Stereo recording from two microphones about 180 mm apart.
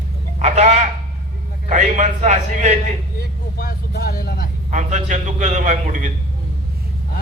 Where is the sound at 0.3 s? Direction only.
40° right (ahead or behind).